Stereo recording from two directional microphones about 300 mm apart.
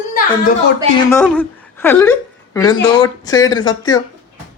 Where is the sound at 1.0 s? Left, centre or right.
Centre.